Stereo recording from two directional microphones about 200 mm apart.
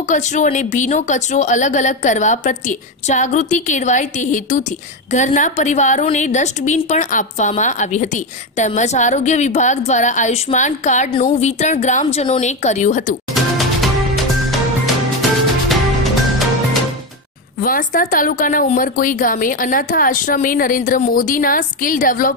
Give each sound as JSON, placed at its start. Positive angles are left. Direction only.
{"t": 0.1, "sound": "a woman's voice", "side_deg": 40}
{"t": 13.3, "sound": "music", "side_deg": 0}
{"t": 15.7, "sound": "music", "side_deg": 0}
{"t": 17.6, "sound": "a woman's voice", "side_deg": 45}